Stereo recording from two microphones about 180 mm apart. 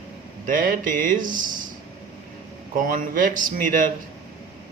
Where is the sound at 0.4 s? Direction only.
50° right (ahead or behind).